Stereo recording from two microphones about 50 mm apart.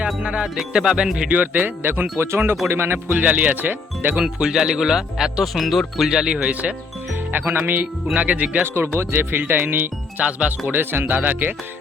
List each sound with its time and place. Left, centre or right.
0.2 s speech: right
1.3 s speech: right
2.1 s speech: right
4.4 s speech: centre
6.3 s speech: right
7.1 s speech: right
8.1 s speech: right
8.6 s speech: right